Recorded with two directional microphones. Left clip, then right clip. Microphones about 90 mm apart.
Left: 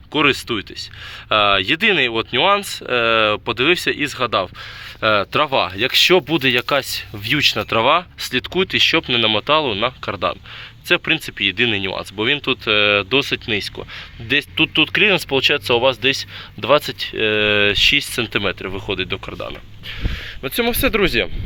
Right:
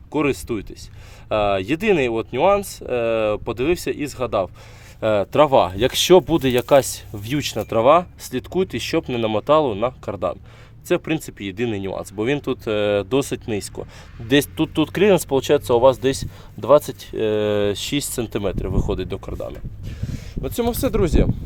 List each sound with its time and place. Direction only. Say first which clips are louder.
0.1 s speech: left 5 dB; 35° right (ahead or behind)
5.3 s speech: right 3 dB; 45° right (ahead or behind)
7.7 s speech: right 1 dB; 45° right (ahead or behind)
9.5 s speech: right 4 dB; 60° right (ahead or behind)
9.7 s speech: left 3 dB; 40° right (ahead or behind)
12.6 s speech: left 5 dB; 75° right (ahead or behind)
15.3 s speech: left 1 dB; 65° right (ahead or behind)
18.2 s speech: left 4 dB; 45° right (ahead or behind)
18.9 s speech: left 7 dB; 90° right
20.4 s speech: left 3 dB; 40° right (ahead or behind)